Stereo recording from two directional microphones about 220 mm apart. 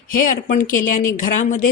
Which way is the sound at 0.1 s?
40° left (ahead or behind).